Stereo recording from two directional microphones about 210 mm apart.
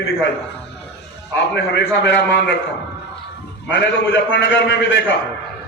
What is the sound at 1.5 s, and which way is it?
Speech, 55° left (ahead or behind).